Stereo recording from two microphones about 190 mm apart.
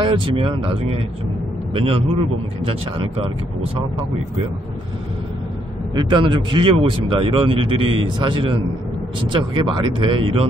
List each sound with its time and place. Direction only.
0.0 s speech: 25° right (ahead or behind)
5.9 s speech: 25° right (ahead or behind)